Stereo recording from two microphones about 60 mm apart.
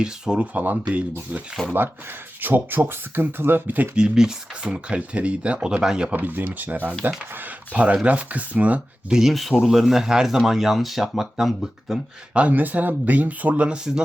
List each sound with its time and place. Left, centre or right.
0.0 s speech: centre
0.5 s speech: right
1.6 s speech: centre
2.4 s speech: right
3.9 s speech: centre
6.1 s speech: right
9.3 s speech: centre
12.3 s speech: right